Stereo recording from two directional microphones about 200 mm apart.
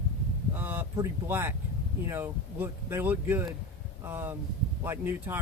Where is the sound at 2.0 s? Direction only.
10° right (ahead or behind).